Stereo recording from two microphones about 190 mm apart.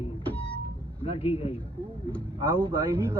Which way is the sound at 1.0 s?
30° left (ahead or behind).